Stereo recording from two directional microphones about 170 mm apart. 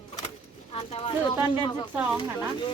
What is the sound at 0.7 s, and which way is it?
Speech, 35° left (ahead or behind).